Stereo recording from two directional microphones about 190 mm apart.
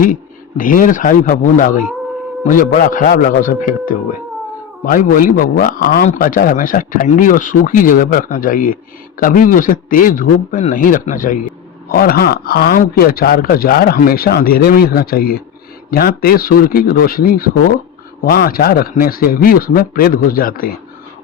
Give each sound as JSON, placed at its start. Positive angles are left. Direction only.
{"t": 0.0, "sound": "a man's voice", "side_deg": 45}